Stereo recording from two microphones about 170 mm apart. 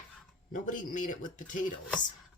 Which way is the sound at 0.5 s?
50° left (ahead or behind).